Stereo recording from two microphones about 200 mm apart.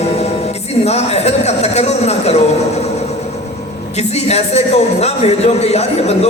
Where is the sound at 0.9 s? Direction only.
30° left (ahead or behind).